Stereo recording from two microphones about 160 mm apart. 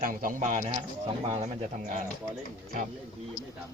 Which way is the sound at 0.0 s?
60° right (ahead or behind).